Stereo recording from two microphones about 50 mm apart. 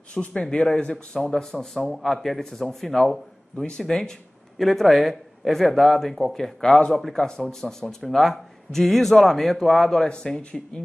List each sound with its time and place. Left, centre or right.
0.1 s speech: left
1.6 s speech: centre
3.5 s speech: centre
7.2 s a man's voice: centre